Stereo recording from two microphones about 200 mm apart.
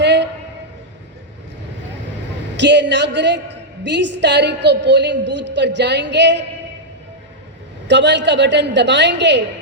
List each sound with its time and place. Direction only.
0.0 s a sound: 60° right (ahead or behind)
2.6 s a woman's voice: 60° right (ahead or behind)
7.9 s a woman's voice: 60° right (ahead or behind)